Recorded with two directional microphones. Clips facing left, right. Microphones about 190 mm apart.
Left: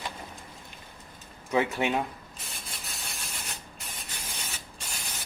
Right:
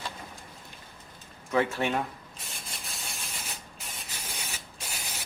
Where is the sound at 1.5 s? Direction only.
15° left (ahead or behind).